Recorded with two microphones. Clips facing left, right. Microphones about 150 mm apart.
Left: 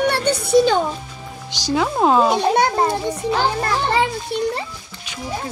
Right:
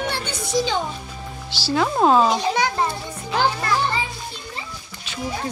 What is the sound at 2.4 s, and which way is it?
Speech, 55° left (ahead or behind).